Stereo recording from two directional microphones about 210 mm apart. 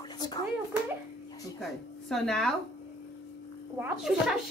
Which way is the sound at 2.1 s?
Centre (ahead or behind).